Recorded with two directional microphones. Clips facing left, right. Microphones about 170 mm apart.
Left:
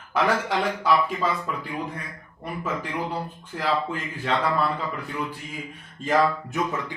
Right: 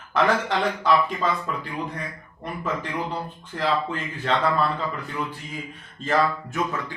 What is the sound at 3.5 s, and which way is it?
Speech, 10° left (ahead or behind).